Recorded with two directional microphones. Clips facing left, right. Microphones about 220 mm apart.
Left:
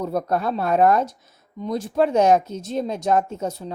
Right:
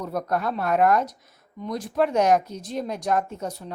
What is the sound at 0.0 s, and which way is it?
A woman's voice, 30° left (ahead or behind).